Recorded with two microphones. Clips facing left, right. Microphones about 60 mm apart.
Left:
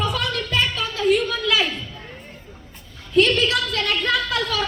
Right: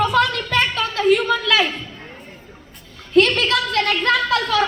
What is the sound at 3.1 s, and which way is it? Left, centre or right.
A woman's voice, right.